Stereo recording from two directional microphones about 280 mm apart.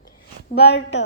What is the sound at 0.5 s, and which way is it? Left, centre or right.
Speech, left.